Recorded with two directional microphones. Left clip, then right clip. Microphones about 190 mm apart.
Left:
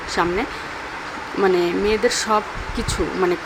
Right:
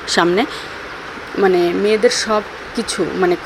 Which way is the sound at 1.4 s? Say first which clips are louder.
Right 4 dB; 10° right (ahead or behind).